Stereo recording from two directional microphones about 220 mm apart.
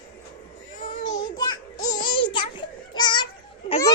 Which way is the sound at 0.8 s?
20° left (ahead or behind).